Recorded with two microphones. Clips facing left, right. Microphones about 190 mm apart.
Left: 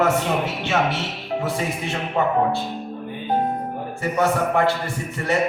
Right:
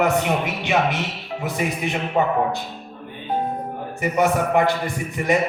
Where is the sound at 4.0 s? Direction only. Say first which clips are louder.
Right 1 dB; 15° right (ahead or behind).